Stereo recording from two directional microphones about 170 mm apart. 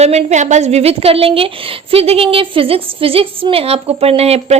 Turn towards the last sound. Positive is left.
turn(degrees=-40)  # may be behind; listen again after turning